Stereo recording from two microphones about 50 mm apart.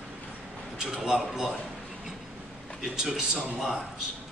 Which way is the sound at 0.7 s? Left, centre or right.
Centre.